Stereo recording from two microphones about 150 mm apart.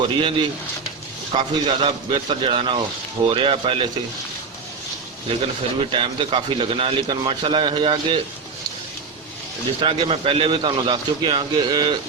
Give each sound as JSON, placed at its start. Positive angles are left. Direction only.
{"t": 0.0, "sound": "a man's voice", "side_deg": -35}
{"t": 5.9, "sound": "a man's voice", "side_deg": -35}
{"t": 9.8, "sound": "a man's voice", "side_deg": -35}